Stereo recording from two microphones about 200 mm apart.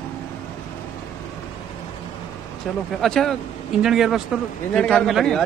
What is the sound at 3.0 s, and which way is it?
Speech, centre (ahead or behind).